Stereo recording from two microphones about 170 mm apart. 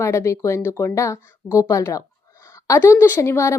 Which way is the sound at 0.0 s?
15° left (ahead or behind).